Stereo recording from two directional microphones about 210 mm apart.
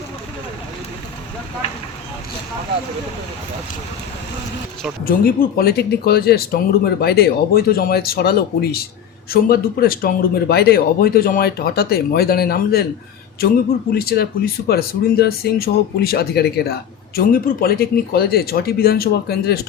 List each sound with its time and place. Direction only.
5.0 s speech: 45° left (ahead or behind)